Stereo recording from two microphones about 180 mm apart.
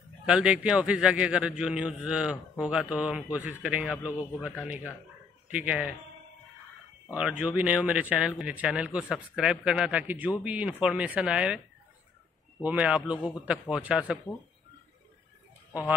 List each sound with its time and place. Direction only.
0.3 s a man's voice: 5° right (ahead or behind)
7.2 s speech: 5° right (ahead or behind)
12.6 s speech: 10° right (ahead or behind)